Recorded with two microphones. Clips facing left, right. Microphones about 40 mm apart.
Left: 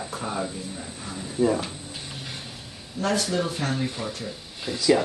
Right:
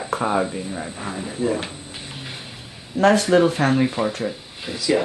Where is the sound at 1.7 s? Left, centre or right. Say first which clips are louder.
Right 2 dB; right.